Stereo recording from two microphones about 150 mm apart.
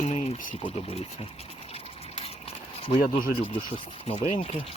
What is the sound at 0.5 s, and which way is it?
Speech, 40° left (ahead or behind).